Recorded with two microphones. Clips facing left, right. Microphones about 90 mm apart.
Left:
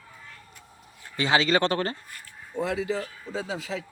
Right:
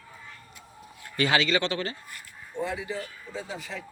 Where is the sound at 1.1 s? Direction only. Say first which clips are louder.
Left 1 dB; 25° left (ahead or behind).